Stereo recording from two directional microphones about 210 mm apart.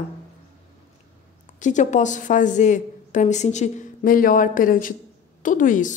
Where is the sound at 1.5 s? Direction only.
35° left (ahead or behind).